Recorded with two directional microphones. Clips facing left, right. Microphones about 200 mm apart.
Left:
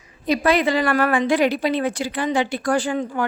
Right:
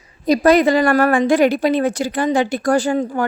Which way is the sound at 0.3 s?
45° right (ahead or behind).